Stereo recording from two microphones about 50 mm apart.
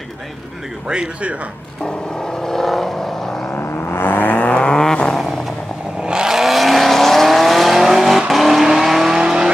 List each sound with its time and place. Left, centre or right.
0.8 s speech: centre
1.9 s vehicle: centre
3.4 s vehicle: left
4.6 s vehicle: centre
5.1 s vehicle: centre
6.0 s vehicle: centre